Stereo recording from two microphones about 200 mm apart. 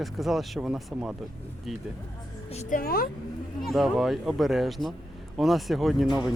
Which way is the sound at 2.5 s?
40° left (ahead or behind).